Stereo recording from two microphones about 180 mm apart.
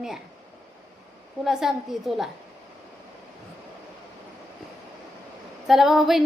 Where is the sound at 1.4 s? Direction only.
Centre (ahead or behind).